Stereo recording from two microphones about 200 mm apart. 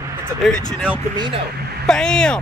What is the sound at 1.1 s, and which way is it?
Speech, 20° right (ahead or behind).